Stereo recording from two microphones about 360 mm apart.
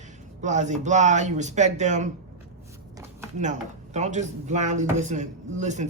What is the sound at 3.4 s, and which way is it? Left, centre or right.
Speech, centre.